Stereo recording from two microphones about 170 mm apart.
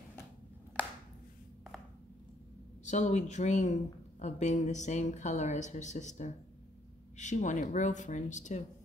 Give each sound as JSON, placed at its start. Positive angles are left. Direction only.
{"t": 2.8, "sound": "speech", "side_deg": 45}